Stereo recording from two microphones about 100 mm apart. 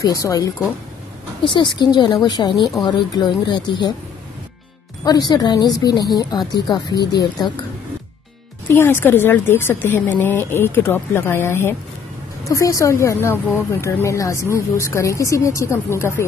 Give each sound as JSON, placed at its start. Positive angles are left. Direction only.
{"t": 0.0, "sound": "speech", "side_deg": 35}
{"t": 1.4, "sound": "a woman's voice", "side_deg": 55}
{"t": 5.0, "sound": "a woman's voice", "side_deg": 45}
{"t": 8.6, "sound": "speech", "side_deg": 20}